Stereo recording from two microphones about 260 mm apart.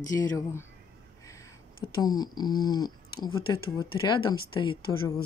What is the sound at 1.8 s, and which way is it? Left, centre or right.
Speech, centre.